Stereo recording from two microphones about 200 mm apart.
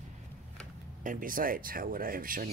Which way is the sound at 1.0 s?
45° right (ahead or behind).